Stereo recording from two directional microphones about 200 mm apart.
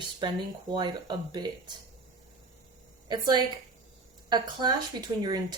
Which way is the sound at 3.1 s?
20° right (ahead or behind).